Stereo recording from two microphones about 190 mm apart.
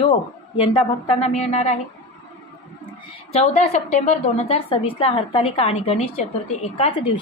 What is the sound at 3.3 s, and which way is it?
A woman's voice, 35° left (ahead or behind).